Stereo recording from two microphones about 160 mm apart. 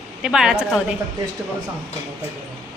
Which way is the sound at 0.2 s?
5° right (ahead or behind).